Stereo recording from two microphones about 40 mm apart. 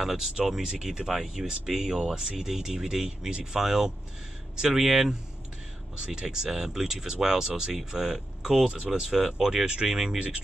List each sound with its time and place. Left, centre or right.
0.0 s speech: centre
5.9 s speech: right
8.6 s speech: right
9.0 s speech: centre